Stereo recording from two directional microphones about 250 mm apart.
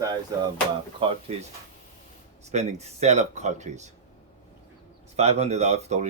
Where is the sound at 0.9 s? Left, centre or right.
Right.